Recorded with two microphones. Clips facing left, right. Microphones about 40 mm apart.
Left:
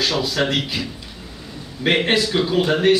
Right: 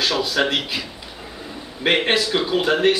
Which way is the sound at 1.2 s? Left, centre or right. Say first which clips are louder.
Right 4 dB; right.